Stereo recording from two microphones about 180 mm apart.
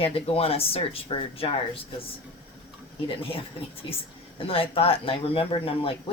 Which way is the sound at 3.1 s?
30° left (ahead or behind).